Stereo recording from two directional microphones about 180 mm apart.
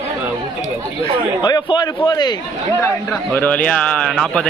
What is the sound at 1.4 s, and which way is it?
Speech, 25° left (ahead or behind).